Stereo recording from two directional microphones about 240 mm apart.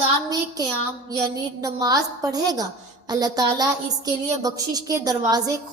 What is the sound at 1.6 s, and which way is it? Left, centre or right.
A woman's voice, centre.